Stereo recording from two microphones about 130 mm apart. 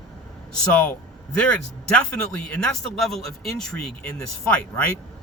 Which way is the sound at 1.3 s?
10° left (ahead or behind).